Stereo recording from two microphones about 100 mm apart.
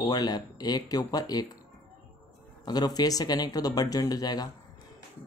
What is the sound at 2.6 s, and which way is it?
Speech, 40° left (ahead or behind).